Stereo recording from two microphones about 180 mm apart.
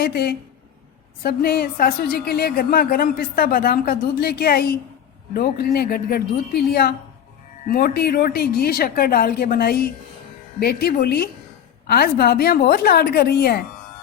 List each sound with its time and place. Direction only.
0.0 s a woman's voice: 60° left (ahead or behind)
7.7 s a woman's voice: 55° left (ahead or behind)